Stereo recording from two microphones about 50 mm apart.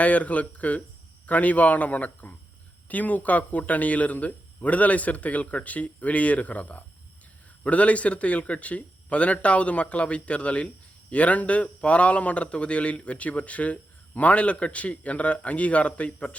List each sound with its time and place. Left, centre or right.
0.0 s a man's voice: left